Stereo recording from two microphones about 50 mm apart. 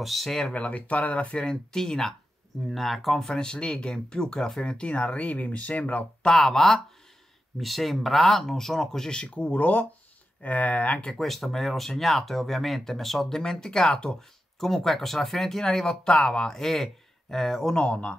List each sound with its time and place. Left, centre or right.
0.0 s speech: centre
0.5 s speech: left; by 3.3 s centre
3.3 s speech: centre
6.2 s speech: centre
9.2 s speech: left
11.1 s speech: centre
17.8 s speech: left